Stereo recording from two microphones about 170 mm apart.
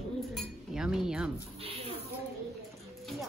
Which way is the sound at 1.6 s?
35° right (ahead or behind).